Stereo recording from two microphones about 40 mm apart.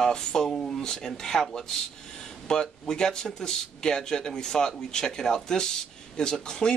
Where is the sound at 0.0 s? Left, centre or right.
Centre.